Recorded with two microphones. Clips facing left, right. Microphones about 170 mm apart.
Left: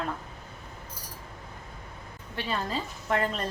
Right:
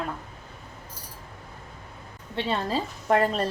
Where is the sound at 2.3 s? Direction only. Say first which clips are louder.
Right 5 dB; 30° right (ahead or behind).